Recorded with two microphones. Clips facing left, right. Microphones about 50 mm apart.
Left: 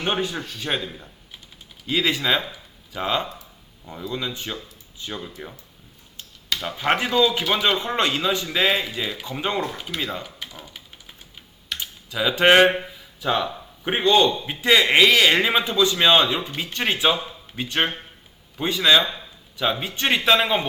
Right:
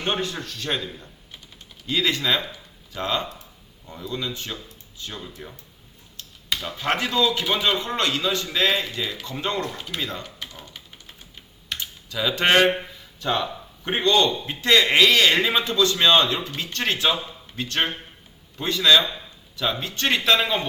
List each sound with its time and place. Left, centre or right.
0.0 s speech: centre
6.6 s speech: centre
10.0 s typewriter: centre
11.8 s speech: centre